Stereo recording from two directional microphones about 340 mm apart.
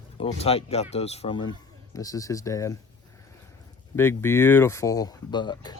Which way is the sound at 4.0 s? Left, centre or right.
Centre.